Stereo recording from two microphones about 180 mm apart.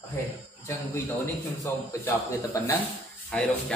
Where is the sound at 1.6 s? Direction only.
20° left (ahead or behind).